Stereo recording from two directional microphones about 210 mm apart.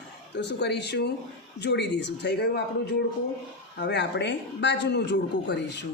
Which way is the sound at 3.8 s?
55° left (ahead or behind).